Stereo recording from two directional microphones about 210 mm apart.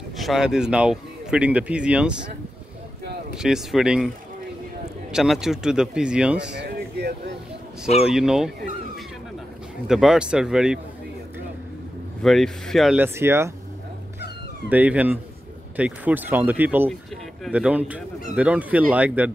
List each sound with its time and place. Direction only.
0.2 s speech: centre (ahead or behind)
3.3 s speech: centre (ahead or behind)
5.1 s speech: centre (ahead or behind)
6.5 s speech: 50° right (ahead or behind)
8.0 s speech: centre (ahead or behind)
9.8 s speech: centre (ahead or behind)
12.2 s speech: centre (ahead or behind)
14.7 s speech: 5° right (ahead or behind)